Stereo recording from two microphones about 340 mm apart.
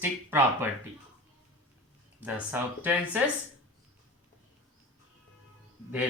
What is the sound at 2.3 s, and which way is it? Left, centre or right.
Speech, centre.